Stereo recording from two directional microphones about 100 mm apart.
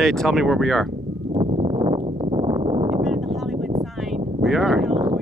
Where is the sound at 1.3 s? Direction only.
60° right (ahead or behind).